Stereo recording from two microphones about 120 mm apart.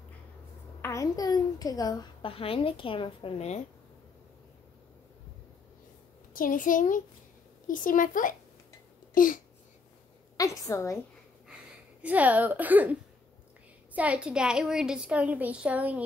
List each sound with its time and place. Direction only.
0.7 s a sound: 20° left (ahead or behind)
1.1 s a child's voice: 30° left (ahead or behind)
2.2 s a woman's voice: 50° left (ahead or behind); by 3.6 s 65° left (ahead or behind)
6.5 s a child's voice: 90° left
10.3 s a woman's voice: 30° left (ahead or behind)
12.0 s a woman's voice: 10° right (ahead or behind)
13.9 s a woman's voice: 10° right (ahead or behind)